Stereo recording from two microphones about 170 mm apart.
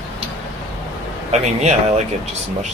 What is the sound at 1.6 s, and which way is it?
Speech, 40° right (ahead or behind).